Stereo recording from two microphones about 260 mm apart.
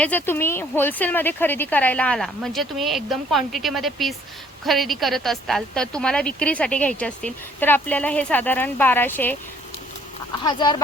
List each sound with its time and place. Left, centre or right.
0.0 s a woman's voice: centre
10.4 s speech: centre